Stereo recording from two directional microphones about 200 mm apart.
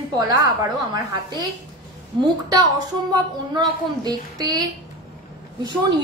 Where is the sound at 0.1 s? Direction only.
20° right (ahead or behind).